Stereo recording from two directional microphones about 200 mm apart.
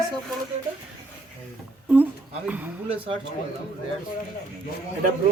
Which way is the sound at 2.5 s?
10° right (ahead or behind).